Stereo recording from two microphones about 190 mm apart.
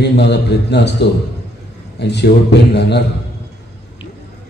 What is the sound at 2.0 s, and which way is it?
A man's voice, 60° left (ahead or behind).